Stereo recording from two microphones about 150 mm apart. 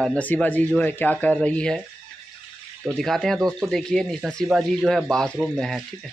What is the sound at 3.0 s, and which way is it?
Speech, centre (ahead or behind).